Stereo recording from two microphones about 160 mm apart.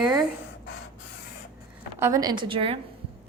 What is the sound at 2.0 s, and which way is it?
Speech, 25° right (ahead or behind).